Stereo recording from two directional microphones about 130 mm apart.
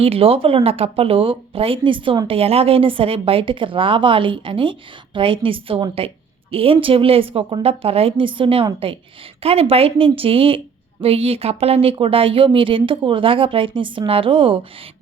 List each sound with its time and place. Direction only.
0.0 s a woman's voice: 50° right (ahead or behind)